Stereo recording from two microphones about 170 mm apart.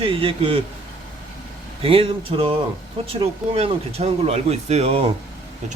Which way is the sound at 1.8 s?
35° right (ahead or behind).